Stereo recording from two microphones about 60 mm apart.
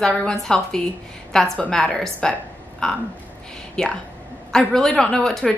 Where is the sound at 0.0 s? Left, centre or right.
Centre.